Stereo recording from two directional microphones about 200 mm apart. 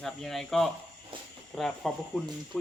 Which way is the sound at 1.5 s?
Centre (ahead or behind).